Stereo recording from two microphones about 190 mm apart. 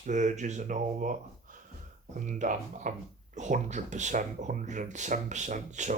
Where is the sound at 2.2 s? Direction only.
40° right (ahead or behind).